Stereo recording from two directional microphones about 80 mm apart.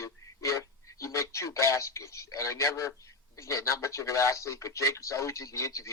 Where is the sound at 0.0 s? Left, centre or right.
Left.